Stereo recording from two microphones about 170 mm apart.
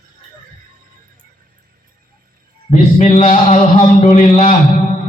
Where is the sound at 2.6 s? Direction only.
40° left (ahead or behind).